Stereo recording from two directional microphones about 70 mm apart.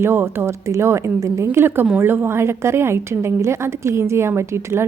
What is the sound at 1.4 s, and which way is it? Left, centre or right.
A woman's voice, right.